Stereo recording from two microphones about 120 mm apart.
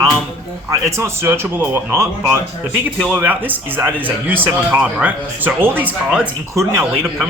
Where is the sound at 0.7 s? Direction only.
25° right (ahead or behind).